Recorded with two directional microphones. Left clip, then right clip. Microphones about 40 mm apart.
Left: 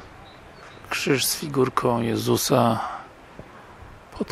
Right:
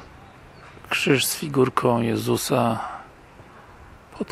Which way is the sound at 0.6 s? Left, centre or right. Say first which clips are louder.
Right 3 dB; centre.